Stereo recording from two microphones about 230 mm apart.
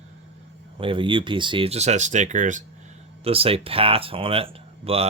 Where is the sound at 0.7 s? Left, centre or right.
Right.